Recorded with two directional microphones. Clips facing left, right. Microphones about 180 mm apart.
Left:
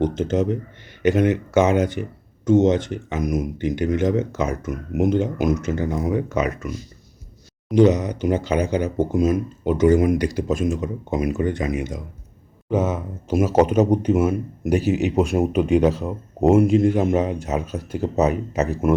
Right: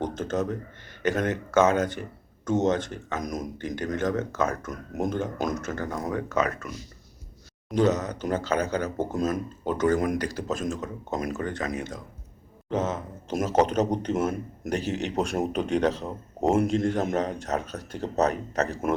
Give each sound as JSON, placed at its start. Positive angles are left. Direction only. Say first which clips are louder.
{"t": 0.3, "sound": "speech", "louder": "left 6 dB", "side_deg": 15}